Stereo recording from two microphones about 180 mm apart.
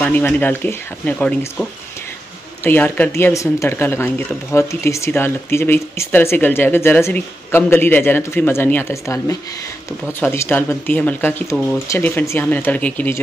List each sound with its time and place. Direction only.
0.0 s speech: 10° left (ahead or behind)